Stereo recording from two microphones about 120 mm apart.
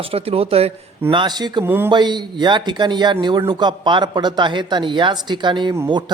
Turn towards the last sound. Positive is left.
turn(degrees=-40)  # may be behind; listen again after turning